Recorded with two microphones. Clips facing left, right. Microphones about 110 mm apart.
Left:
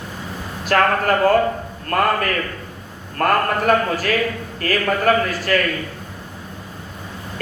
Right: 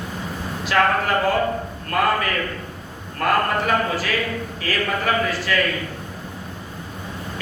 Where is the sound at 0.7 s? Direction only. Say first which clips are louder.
Left 2 dB; 55° left (ahead or behind).